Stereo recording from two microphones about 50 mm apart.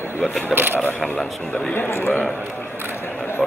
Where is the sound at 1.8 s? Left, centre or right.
Left.